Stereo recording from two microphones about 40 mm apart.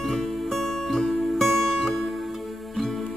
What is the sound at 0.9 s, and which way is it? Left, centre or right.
Music, centre.